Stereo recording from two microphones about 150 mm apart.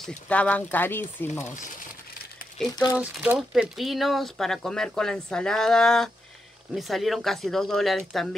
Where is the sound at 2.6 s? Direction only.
Centre (ahead or behind).